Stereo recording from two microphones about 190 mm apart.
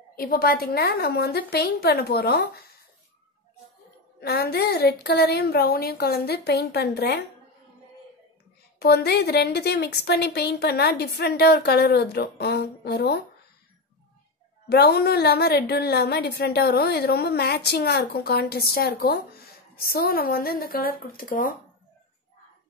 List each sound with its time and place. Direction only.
0.1 s a woman's voice: 50° left (ahead or behind)
4.2 s a woman's voice: 55° left (ahead or behind)
8.7 s a woman's voice: 55° left (ahead or behind)
14.7 s a woman's voice: 55° left (ahead or behind)